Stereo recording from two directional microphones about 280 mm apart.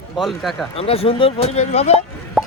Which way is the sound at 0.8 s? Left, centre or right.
Left.